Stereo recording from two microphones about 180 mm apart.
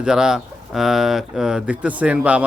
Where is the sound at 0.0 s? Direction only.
5° right (ahead or behind).